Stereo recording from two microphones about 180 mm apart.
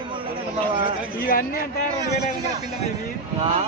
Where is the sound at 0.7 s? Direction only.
30° right (ahead or behind).